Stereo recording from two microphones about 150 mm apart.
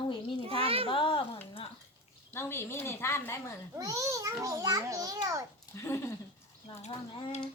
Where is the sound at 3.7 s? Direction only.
20° right (ahead or behind).